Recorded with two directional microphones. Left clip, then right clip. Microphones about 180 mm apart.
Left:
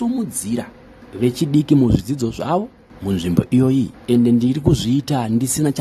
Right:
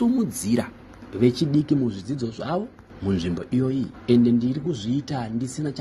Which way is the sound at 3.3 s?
30° left (ahead or behind).